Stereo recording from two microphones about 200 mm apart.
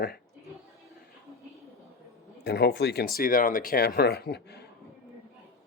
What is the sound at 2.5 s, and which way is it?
Speech, 55° left (ahead or behind).